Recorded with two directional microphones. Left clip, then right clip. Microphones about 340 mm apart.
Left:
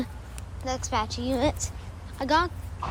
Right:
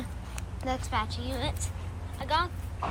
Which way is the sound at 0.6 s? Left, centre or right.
Centre.